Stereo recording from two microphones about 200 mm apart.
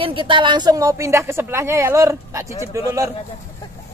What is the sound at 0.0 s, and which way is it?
A child's voice, 25° right (ahead or behind).